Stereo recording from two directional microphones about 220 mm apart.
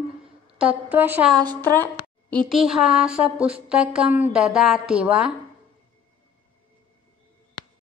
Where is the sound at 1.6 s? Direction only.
10° left (ahead or behind).